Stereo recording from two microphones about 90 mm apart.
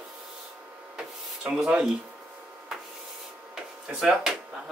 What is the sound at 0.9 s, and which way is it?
Printer, 10° right (ahead or behind).